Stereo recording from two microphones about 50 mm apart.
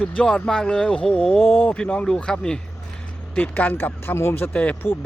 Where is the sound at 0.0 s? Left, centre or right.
Left.